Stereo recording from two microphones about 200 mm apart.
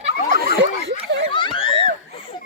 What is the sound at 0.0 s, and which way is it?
Snicker, 45° right (ahead or behind).